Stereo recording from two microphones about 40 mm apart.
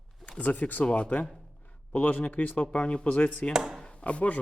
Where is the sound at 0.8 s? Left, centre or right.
Left.